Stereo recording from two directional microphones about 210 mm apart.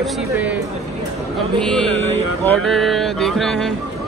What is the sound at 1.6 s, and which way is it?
Music, 5° left (ahead or behind).